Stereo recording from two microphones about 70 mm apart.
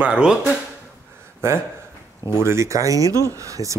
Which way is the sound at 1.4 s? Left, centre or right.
Right.